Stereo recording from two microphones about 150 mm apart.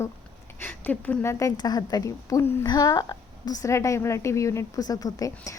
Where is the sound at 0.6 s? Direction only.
10° left (ahead or behind).